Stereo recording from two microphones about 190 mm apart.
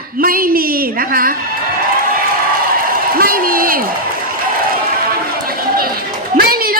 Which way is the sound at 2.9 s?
50° right (ahead or behind).